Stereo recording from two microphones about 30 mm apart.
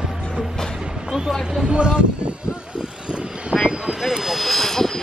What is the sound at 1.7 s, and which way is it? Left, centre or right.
Speech, right.